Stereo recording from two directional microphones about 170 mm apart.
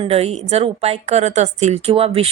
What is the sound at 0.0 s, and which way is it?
A woman's voice, 35° right (ahead or behind).